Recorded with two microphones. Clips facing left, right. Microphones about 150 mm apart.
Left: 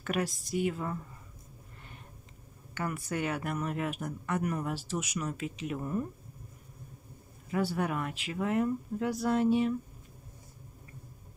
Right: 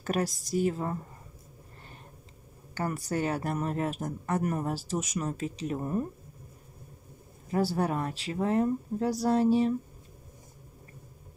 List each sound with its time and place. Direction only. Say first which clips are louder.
0.0 s speech: right 3 dB; 40° right (ahead or behind)
2.7 s speech: right 3 dB; 35° right (ahead or behind)
7.4 s speech: right 3 dB; 35° right (ahead or behind)